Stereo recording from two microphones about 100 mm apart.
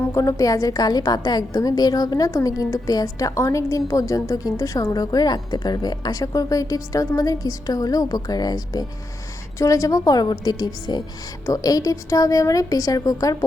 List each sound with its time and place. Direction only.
0.1 s a woman's voice: 30° left (ahead or behind)